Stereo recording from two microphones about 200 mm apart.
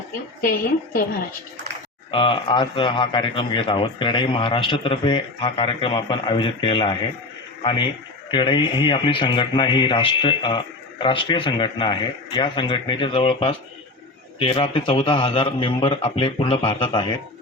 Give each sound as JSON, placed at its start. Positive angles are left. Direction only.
{"t": 0.4, "sound": "a woman's voice", "side_deg": 50}
{"t": 2.0, "sound": "speech", "side_deg": 25}